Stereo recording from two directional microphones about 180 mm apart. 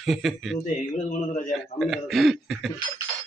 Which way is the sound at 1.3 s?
45° left (ahead or behind).